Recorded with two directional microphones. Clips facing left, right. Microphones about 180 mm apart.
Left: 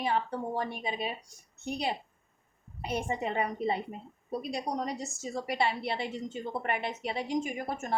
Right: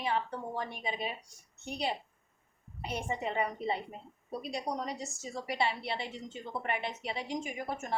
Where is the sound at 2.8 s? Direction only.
45° left (ahead or behind).